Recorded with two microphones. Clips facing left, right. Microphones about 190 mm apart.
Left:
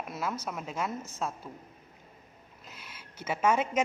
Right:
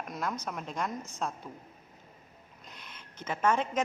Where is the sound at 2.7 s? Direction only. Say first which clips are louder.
Left 1 dB; 5° left (ahead or behind).